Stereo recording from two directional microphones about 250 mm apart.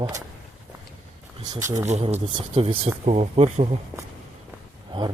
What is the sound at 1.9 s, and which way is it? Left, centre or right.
Speech, right.